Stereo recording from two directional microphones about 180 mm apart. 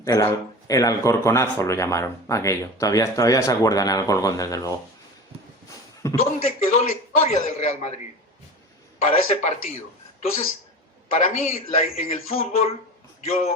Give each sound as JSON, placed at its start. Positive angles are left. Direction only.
{"t": 0.0, "sound": "speech", "side_deg": 15}
{"t": 6.0, "sound": "speech", "side_deg": 15}
{"t": 6.4, "sound": "speech", "side_deg": 35}
{"t": 9.0, "sound": "speech", "side_deg": 35}